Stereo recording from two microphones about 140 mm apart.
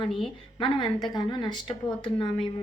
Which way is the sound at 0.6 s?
35° left (ahead or behind).